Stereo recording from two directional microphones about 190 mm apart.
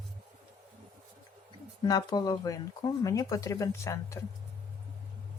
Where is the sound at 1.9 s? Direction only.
20° left (ahead or behind).